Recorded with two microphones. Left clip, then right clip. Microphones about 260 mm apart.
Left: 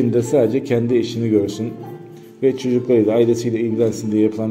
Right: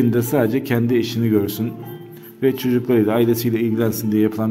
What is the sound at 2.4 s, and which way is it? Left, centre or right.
Speech, right.